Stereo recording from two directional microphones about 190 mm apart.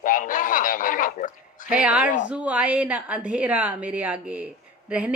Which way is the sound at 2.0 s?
40° left (ahead or behind).